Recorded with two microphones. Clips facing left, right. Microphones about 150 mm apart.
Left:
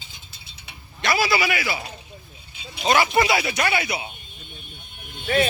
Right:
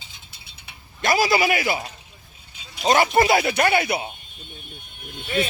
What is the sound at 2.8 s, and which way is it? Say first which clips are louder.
Speech: right 2 dB; 40° right (ahead or behind).